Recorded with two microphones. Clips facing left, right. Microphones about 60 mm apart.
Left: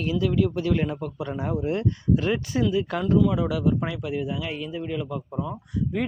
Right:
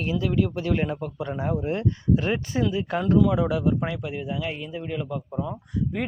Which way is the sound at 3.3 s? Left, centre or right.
Right.